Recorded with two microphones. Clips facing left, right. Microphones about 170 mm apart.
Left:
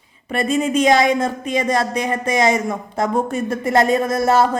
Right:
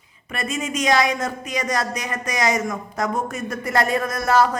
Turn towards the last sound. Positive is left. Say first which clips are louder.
# left 3 dB
turn(degrees=25)  # may be behind; listen again after turning